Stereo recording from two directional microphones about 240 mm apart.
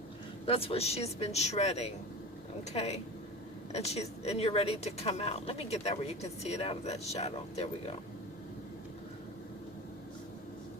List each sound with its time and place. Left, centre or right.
0.4 s speech: left